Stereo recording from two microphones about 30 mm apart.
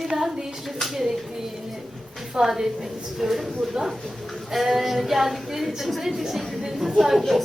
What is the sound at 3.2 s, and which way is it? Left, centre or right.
A woman's voice, centre.